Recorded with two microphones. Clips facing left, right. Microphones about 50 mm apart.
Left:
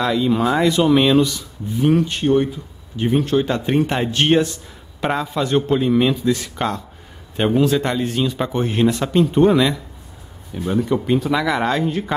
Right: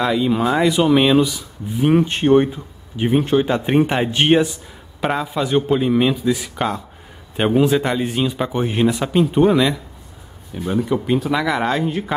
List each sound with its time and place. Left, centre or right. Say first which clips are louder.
0.0 s speech: even; centre
1.9 s speech: right 2 dB; right
3.0 s speech: right 1 dB; centre